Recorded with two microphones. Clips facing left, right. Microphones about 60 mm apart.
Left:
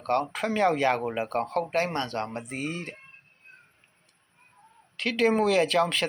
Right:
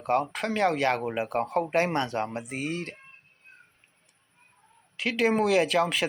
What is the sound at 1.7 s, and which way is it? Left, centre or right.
Speech, right.